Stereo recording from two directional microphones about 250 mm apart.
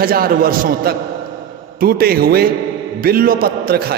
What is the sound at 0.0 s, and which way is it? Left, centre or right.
A man's voice, right.